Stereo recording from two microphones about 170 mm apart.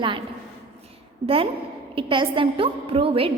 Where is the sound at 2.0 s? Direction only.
30° right (ahead or behind).